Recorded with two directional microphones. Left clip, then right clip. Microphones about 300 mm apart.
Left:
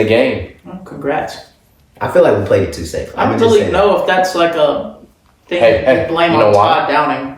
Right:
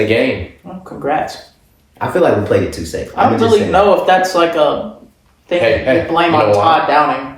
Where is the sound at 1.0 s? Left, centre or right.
Centre.